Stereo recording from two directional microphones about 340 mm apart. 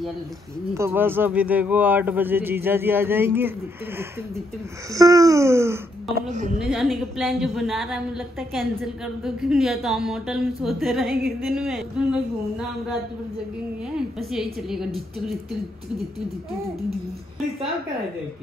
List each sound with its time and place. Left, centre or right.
0.7 s a woman's voice: centre
4.9 s speech: centre
6.1 s a woman's voice: right
6.6 s a woman's voice: centre
13.9 s a woman's voice: centre